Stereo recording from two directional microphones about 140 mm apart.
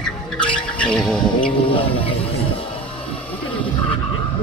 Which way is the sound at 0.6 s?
5° left (ahead or behind).